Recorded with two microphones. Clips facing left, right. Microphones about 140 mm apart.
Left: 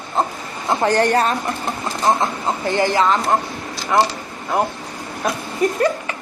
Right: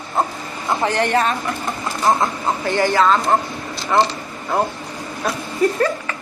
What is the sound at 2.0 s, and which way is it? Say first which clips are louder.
A woman's voice: even; 25° left (ahead or behind).